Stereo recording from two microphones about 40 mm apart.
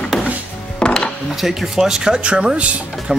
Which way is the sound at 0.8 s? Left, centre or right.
Left.